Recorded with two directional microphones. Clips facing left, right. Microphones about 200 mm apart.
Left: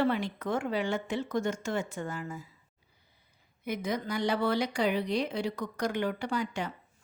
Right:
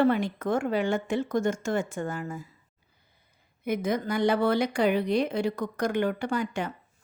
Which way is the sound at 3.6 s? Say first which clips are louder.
Right 5 dB; 50° right (ahead or behind).